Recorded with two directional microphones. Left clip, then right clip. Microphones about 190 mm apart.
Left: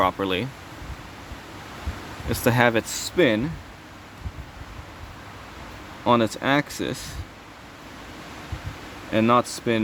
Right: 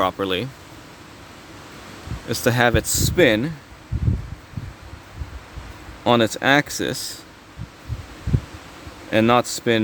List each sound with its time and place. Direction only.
0.0 s speech: 15° right (ahead or behind)
2.3 s speech: 10° right (ahead or behind)
6.1 s speech: 25° right (ahead or behind)
9.0 s speech: 25° right (ahead or behind)